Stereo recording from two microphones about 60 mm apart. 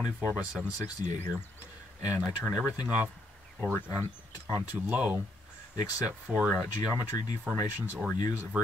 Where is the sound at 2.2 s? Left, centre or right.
Centre.